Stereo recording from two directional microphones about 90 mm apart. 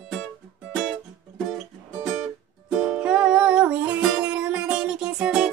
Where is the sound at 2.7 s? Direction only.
10° right (ahead or behind).